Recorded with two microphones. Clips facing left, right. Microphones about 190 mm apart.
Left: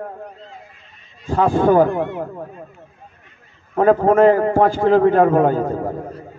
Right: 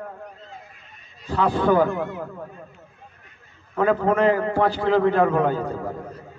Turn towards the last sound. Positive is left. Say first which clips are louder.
# left 6 dB
turn(degrees=45)  # may be behind; listen again after turning